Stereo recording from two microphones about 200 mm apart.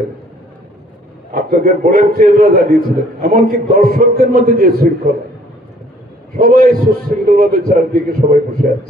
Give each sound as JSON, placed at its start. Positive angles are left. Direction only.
{"t": 1.3, "sound": "a man's voice", "side_deg": -45}
{"t": 6.3, "sound": "a man's voice", "side_deg": -45}